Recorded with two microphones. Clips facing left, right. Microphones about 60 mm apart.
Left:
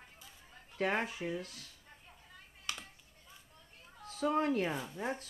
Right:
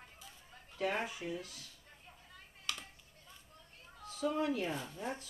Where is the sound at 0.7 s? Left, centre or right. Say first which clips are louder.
Left 3 dB; left.